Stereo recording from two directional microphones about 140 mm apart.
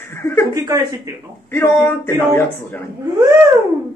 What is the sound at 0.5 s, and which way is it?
Speech, 25° right (ahead or behind).